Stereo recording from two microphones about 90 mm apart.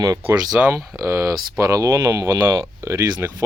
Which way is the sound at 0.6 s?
15° right (ahead or behind).